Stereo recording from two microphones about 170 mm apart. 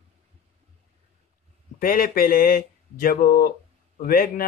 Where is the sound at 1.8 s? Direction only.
55° left (ahead or behind).